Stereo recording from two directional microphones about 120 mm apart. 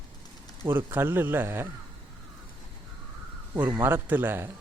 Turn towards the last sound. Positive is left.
turn(degrees=-15)  # may be behind; listen again after turning